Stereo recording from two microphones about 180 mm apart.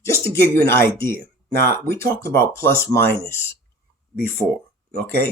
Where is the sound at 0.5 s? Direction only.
15° left (ahead or behind).